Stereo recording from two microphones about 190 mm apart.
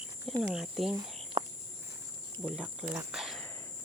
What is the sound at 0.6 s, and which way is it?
Speech, centre (ahead or behind).